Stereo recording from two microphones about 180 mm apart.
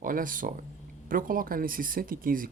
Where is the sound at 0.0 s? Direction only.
50° right (ahead or behind).